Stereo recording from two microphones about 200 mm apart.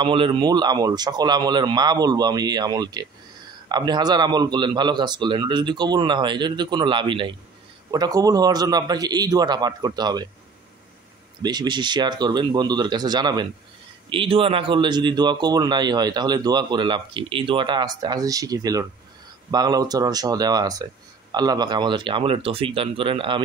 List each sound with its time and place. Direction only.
0.0 s a man's voice: 25° right (ahead or behind)
11.4 s a man's voice: 20° right (ahead or behind)